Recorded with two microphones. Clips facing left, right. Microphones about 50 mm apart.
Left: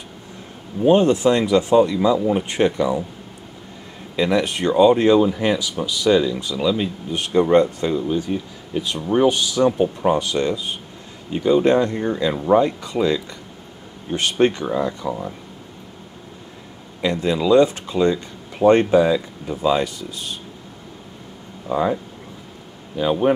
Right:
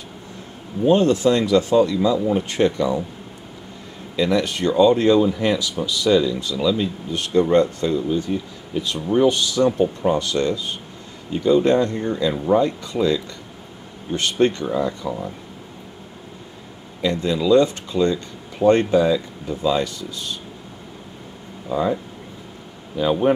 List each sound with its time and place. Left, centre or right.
0.8 s speech: left
4.2 s speech: left
17.0 s speech: centre
21.6 s speech: centre
22.9 s speech: centre